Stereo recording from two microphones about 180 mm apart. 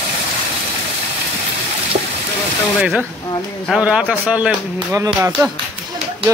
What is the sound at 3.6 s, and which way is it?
A man's voice, 5° right (ahead or behind).